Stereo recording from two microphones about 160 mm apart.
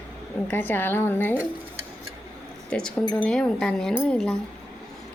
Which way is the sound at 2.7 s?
5° left (ahead or behind).